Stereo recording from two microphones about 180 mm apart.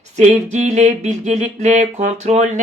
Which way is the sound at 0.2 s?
40° right (ahead or behind).